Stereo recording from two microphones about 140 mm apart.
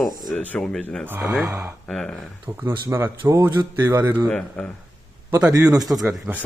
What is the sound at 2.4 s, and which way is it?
Speech, 15° right (ahead or behind).